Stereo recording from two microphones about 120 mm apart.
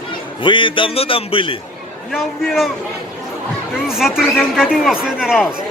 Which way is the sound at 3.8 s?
5° right (ahead or behind).